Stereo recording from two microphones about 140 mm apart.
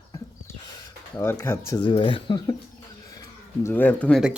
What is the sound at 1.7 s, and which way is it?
Speech, 35° left (ahead or behind).